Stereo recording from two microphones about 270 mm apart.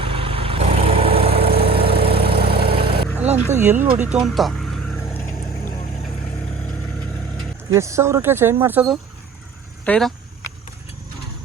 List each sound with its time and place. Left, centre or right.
0.0 s vehicle: centre
1.5 s vehicle: right
3.5 s speech: centre
3.9 s vehicle: centre
7.7 s speech: centre
9.8 s speech: centre